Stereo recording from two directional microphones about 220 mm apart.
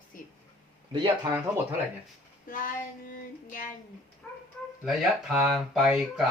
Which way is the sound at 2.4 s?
40° left (ahead or behind).